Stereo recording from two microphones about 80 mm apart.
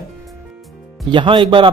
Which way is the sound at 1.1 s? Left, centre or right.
Right.